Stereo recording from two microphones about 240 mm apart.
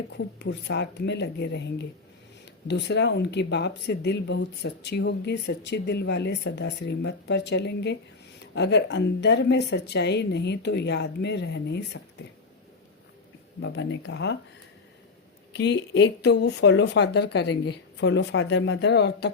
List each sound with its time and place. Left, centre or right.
0.3 s speech: left
13.6 s speech: left
15.5 s speech: left